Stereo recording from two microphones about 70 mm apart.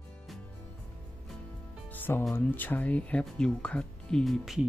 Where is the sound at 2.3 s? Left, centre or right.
Left.